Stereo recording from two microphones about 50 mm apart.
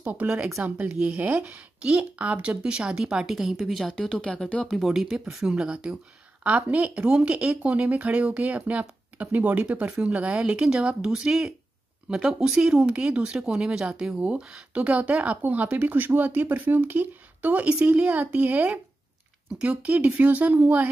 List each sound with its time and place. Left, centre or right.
0.0 s a woman's voice: right; by 5.7 s centre
5.7 s a woman's voice: right
17.7 s speech: centre
18.0 s speech: right